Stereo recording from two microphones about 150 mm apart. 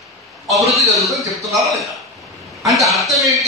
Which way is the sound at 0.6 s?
Centre (ahead or behind).